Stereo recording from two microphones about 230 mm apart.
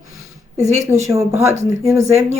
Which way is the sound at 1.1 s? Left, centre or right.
Centre.